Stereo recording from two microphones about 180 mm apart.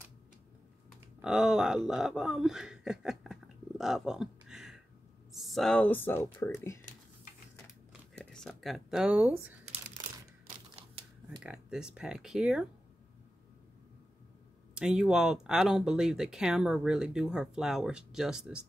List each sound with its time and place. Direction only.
1.2 s speech: 5° right (ahead or behind); by 6.8 s 15° left (ahead or behind)
8.1 s speech: 5° left (ahead or behind)
11.4 s speech: 5° right (ahead or behind)
14.7 s speech: 5° right (ahead or behind)